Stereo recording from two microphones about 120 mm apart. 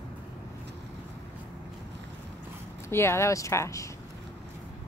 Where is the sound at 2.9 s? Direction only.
20° left (ahead or behind).